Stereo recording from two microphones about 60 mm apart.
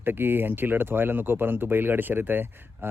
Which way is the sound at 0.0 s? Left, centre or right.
Right.